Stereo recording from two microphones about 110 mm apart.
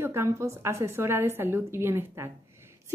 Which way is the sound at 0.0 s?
20° right (ahead or behind).